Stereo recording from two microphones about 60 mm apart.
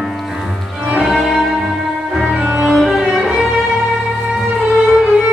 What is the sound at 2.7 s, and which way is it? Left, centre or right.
Music, centre.